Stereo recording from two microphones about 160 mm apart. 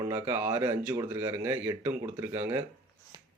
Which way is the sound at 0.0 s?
15° right (ahead or behind).